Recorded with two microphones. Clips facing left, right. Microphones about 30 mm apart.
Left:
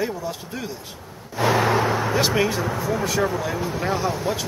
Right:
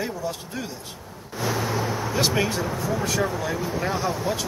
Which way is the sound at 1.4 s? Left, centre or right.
Left.